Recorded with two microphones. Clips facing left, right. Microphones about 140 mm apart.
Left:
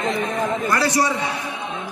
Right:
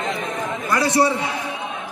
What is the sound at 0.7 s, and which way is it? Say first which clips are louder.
Speech: right 4 dB; 20° right (ahead or behind).